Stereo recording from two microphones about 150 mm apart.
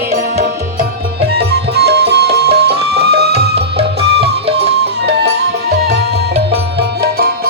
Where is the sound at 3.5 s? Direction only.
40° right (ahead or behind).